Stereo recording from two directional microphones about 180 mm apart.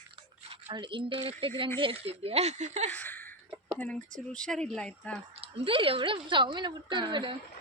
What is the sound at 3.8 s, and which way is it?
Speech, 5° left (ahead or behind).